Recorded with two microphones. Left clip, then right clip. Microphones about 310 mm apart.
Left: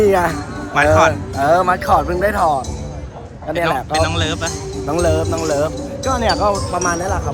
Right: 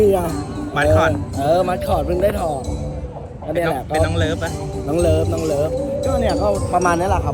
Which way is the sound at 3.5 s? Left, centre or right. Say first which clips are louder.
Left 2 dB; centre.